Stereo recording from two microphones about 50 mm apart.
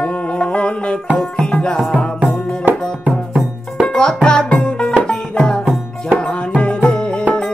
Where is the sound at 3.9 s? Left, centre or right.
Centre.